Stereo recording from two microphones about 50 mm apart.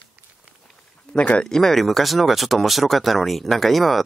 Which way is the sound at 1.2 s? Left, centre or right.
Left.